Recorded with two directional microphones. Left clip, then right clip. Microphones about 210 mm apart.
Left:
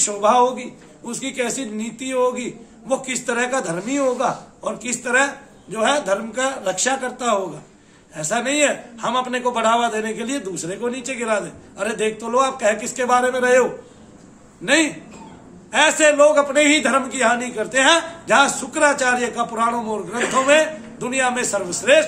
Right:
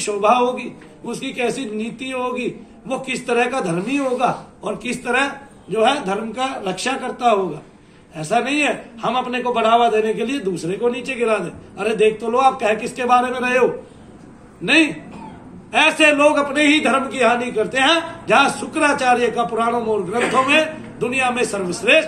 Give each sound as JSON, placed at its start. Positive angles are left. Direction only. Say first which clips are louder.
{"t": 0.0, "sound": "a man's voice", "louder": "even", "side_deg": 20}